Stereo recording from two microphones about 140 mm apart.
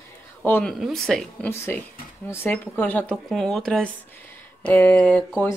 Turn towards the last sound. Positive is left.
turn(degrees=10)  # may be behind; listen again after turning